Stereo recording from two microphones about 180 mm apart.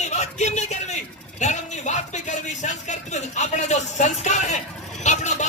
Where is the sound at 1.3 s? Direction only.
40° left (ahead or behind).